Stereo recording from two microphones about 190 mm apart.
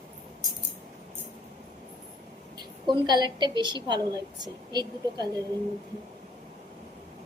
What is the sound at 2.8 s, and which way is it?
A woman's voice, 25° right (ahead or behind).